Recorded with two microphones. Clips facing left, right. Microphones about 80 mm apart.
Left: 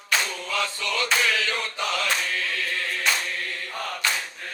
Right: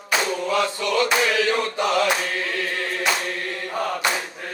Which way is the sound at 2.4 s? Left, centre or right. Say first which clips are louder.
Right 3 dB; right.